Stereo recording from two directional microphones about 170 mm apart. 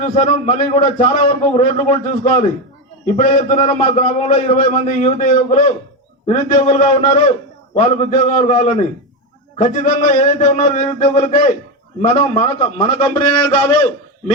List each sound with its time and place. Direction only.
0.0 s a man's voice: 35° left (ahead or behind)